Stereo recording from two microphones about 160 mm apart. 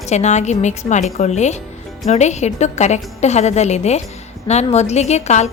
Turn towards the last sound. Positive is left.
turn(degrees=45)  # may be behind; listen again after turning